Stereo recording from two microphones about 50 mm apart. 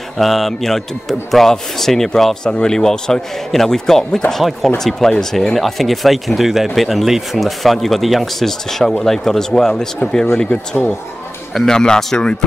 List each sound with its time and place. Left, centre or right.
0.2 s a man's voice: centre